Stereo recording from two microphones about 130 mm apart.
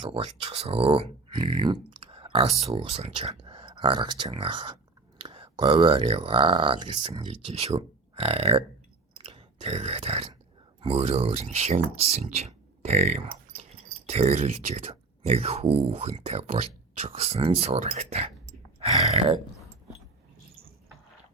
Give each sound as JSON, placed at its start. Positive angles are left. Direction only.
{"t": 0.0, "sound": "speech", "side_deg": -45}
{"t": 2.0, "sound": "speech", "side_deg": -45}
{"t": 9.2, "sound": "grunt", "side_deg": -40}
{"t": 10.8, "sound": "speech", "side_deg": -50}